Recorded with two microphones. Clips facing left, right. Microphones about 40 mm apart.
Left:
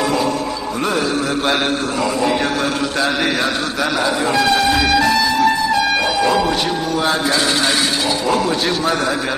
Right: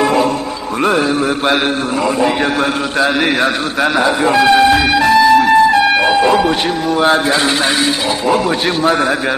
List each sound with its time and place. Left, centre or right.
0.0 s music: right
3.8 s air horn: right
7.0 s a man's voice: right
8.5 s a man's voice: right